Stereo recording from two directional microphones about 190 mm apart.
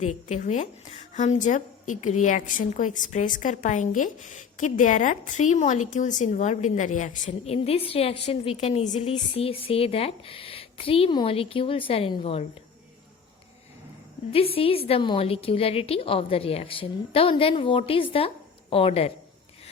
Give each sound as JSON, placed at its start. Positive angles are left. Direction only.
{"t": 0.0, "sound": "a woman's voice", "side_deg": 40}
{"t": 14.3, "sound": "a woman's voice", "side_deg": 30}